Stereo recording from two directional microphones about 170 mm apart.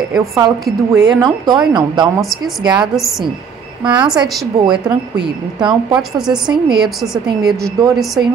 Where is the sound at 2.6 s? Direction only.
25° right (ahead or behind).